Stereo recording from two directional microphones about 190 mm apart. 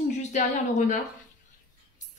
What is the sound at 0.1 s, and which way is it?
Speech, 40° left (ahead or behind).